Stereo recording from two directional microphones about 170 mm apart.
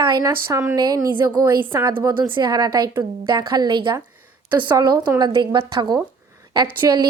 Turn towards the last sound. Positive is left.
turn(degrees=-25)  # may be behind; listen again after turning